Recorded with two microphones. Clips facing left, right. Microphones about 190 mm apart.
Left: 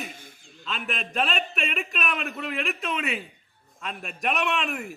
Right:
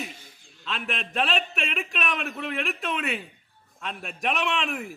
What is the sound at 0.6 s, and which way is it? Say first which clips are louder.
A man's voice: even; centre (ahead or behind).